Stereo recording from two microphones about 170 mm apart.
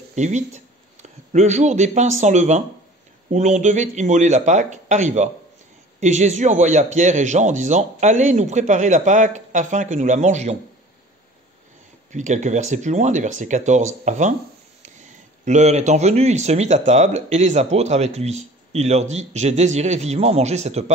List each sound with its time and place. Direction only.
0.1 s speech: 45° right (ahead or behind)
12.1 s speech: 45° right (ahead or behind)
15.4 s speech: 40° right (ahead or behind)